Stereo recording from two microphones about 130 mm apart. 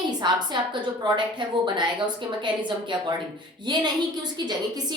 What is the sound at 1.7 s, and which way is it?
Speech, 35° right (ahead or behind).